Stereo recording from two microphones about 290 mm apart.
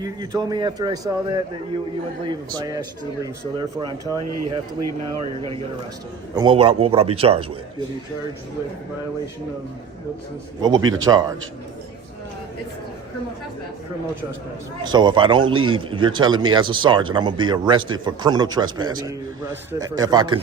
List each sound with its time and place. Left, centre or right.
0.0 s a man's voice: centre
4.8 s speech: right
6.3 s a man's voice: centre
10.8 s a man's voice: right
11.0 s a man's voice: centre
14.8 s a man's voice: centre